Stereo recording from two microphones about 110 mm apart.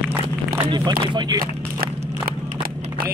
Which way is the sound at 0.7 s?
45° right (ahead or behind).